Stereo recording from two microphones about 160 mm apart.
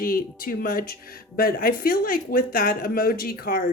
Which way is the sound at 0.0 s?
60° left (ahead or behind).